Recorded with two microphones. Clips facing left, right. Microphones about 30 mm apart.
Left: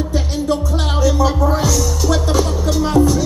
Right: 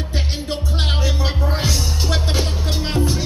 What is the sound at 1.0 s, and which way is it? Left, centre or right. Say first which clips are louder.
Music: left 8 dB; right.